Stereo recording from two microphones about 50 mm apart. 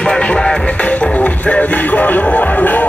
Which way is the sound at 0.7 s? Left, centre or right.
Left.